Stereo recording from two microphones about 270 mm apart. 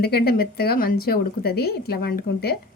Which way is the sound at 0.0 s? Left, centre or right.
Left.